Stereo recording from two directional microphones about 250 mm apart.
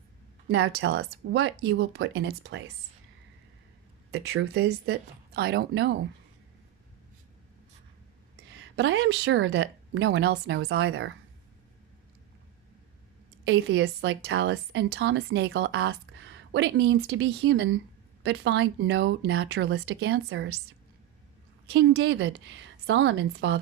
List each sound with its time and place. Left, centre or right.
0.5 s speech: right
4.1 s speech: right
8.7 s speech: right
13.4 s speech: right
21.7 s speech: right